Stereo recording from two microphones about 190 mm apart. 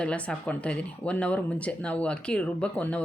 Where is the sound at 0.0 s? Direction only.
5° left (ahead or behind).